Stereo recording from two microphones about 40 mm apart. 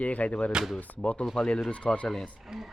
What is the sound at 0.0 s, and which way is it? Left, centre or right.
Speech, left.